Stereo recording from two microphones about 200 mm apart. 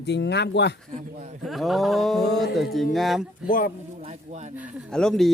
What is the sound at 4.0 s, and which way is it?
Speech, 35° right (ahead or behind).